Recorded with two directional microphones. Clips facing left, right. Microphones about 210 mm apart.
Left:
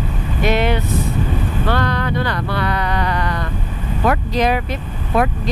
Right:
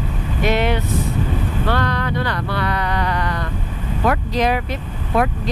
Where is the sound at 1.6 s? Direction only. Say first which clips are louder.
Left 2 dB; 10° left (ahead or behind).